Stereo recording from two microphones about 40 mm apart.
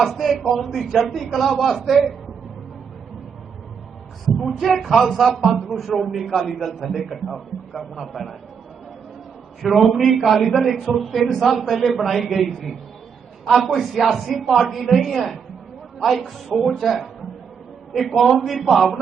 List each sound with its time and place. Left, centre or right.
0.0 s a man's voice: centre
4.3 s a man's voice: centre
9.6 s a man's voice: centre
13.9 s a man's voice: centre